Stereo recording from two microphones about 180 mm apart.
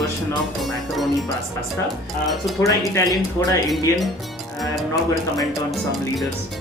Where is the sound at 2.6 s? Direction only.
20° left (ahead or behind).